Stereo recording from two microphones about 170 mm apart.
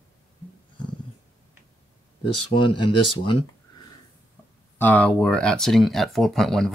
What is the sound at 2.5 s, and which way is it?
Speech, 30° left (ahead or behind).